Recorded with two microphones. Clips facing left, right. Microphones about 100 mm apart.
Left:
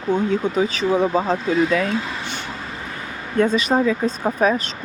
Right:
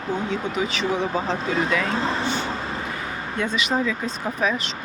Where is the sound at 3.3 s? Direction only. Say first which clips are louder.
Left 7 dB; 40° left (ahead or behind).